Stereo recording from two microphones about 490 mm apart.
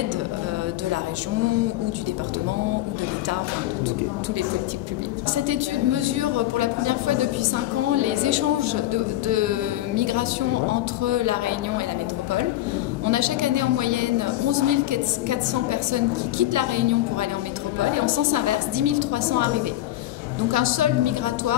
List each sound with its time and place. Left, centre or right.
5.5 s a woman's voice: right
13.1 s a woman's voice: right
20.5 s a woman's voice: right